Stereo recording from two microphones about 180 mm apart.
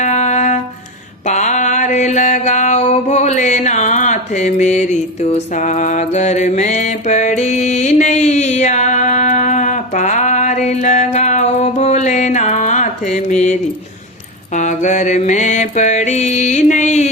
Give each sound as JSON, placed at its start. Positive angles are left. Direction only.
{"t": 0.0, "sound": "music", "side_deg": 40}
{"t": 1.3, "sound": "mantra", "side_deg": 40}